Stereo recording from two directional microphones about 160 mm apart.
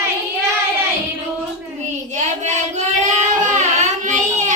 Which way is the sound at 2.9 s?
55° right (ahead or behind).